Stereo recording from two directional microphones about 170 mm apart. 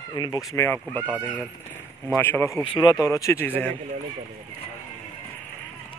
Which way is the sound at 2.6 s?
30° left (ahead or behind).